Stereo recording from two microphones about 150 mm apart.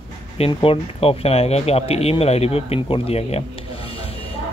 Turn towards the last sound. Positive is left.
turn(degrees=40)  # may be behind; listen again after turning